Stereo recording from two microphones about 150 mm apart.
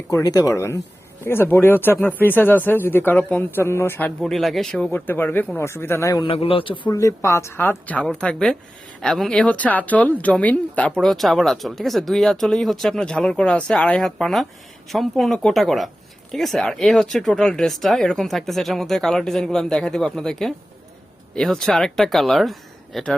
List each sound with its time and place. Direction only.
0.1 s speech: 20° left (ahead or behind)
4.2 s speech: centre (ahead or behind); by 6.2 s 20° left (ahead or behind)
6.2 s a man's voice: 40° left (ahead or behind)
6.9 s speech: 20° left (ahead or behind); by 23.1 s centre (ahead or behind)